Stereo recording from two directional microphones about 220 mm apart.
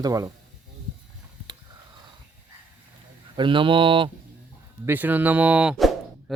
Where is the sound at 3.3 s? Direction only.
20° right (ahead or behind).